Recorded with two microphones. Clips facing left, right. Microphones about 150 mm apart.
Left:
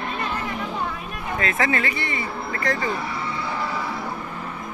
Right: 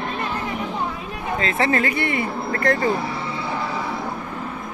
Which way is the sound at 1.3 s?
30° right (ahead or behind).